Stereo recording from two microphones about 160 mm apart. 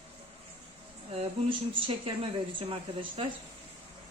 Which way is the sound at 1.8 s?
35° right (ahead or behind).